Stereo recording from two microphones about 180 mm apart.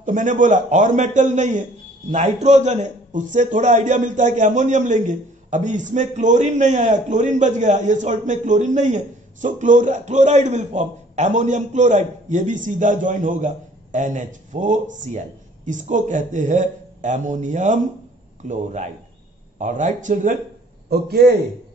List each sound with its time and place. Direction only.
0.0 s a man's voice: 45° right (ahead or behind)